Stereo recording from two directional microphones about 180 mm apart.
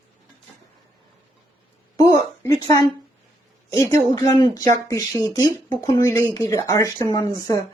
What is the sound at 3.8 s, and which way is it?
Speech, 20° left (ahead or behind).